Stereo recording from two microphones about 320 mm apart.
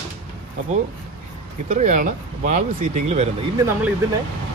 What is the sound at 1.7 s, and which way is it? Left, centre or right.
Speech, right.